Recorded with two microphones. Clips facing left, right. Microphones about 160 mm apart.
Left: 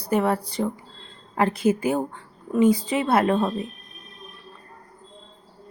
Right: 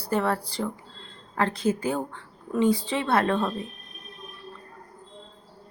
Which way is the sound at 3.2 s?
20° left (ahead or behind).